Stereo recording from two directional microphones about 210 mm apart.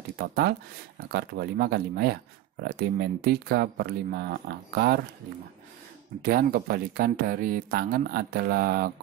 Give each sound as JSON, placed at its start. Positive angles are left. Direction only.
{"t": 0.2, "sound": "speech", "side_deg": -50}
{"t": 6.2, "sound": "speech", "side_deg": -45}